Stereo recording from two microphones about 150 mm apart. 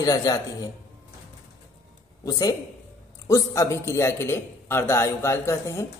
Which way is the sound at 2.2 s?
25° left (ahead or behind).